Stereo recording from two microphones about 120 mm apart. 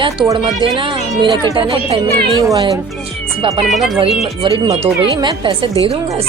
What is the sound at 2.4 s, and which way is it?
Speech, 30° right (ahead or behind).